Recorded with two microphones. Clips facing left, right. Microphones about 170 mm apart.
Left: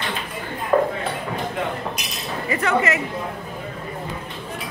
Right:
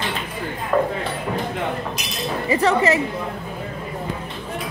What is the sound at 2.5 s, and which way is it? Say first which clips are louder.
Speech: right 3 dB; 30° right (ahead or behind).